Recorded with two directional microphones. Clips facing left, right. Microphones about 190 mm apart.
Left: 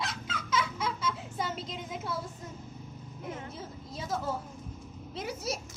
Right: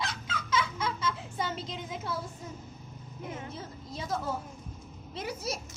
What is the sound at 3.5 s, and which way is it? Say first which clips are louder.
A woman's voice: right 1 dB; centre (ahead or behind).